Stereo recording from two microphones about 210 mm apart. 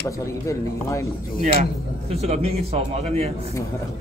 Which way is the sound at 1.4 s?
30° right (ahead or behind).